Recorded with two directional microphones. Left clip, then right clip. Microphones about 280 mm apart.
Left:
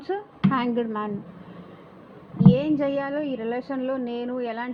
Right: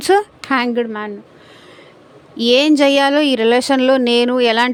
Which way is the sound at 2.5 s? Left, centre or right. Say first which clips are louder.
Right 12 dB; right.